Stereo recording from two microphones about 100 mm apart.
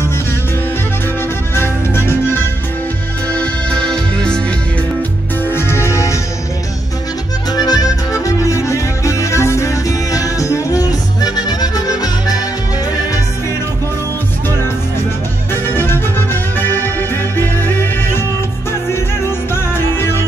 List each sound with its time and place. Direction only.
1.5 s music: 25° left (ahead or behind)
3.3 s music: 5° left (ahead or behind)
5.4 s music: 25° left (ahead or behind)
7.5 s music: 40° left (ahead or behind)
15.5 s music: 20° left (ahead or behind)
19.5 s music: 25° left (ahead or behind)